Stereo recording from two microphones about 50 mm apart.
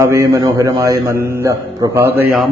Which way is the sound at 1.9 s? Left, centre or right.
Right.